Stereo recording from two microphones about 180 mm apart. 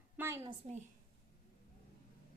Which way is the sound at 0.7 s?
35° right (ahead or behind).